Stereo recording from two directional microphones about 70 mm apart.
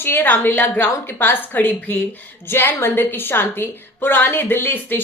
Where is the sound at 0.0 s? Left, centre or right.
Left.